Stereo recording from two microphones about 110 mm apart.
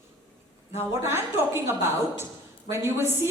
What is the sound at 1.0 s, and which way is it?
A woman's voice, 20° right (ahead or behind).